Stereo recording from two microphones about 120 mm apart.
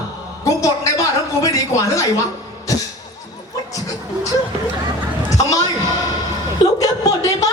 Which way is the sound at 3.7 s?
30° left (ahead or behind).